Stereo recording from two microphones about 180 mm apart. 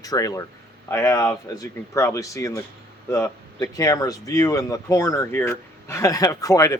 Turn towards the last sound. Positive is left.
turn(degrees=20)  # may be behind; listen again after turning